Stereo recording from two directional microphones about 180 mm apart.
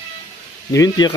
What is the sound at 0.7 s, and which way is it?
Speech, 20° left (ahead or behind).